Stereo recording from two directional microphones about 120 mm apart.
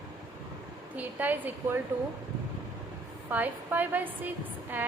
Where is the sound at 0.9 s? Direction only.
15° right (ahead or behind).